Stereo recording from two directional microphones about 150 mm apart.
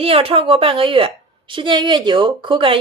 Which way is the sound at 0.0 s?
40° right (ahead or behind).